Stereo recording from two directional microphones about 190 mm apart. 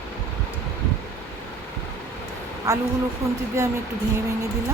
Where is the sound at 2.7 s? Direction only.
15° right (ahead or behind).